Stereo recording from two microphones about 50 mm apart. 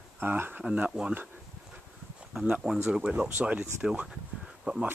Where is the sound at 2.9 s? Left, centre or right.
Right.